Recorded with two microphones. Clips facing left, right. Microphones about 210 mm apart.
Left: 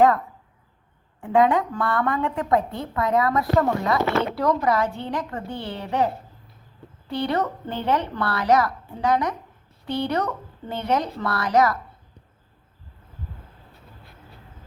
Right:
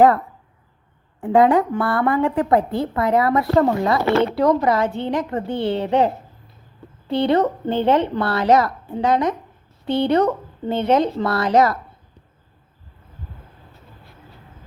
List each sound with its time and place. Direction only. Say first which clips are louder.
1.2 s a woman's voice: right 4 dB; 35° right (ahead or behind)
7.1 s a woman's voice: right 7 dB; 25° right (ahead or behind)